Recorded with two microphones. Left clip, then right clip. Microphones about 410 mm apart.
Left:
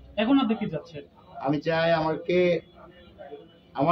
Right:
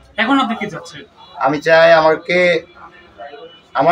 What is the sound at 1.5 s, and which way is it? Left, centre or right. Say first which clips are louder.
Speech: right 15 dB; left.